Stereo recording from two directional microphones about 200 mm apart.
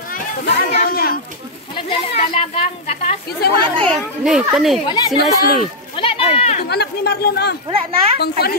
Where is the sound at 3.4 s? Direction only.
50° left (ahead or behind).